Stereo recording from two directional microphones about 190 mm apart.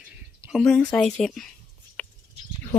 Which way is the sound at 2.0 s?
5° left (ahead or behind).